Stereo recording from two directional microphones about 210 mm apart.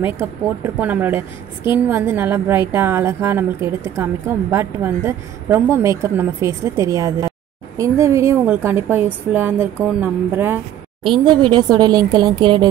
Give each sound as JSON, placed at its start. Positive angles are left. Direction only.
{"t": 0.7, "sound": "a woman's voice", "side_deg": -10}
{"t": 11.1, "sound": "a woman's voice", "side_deg": -20}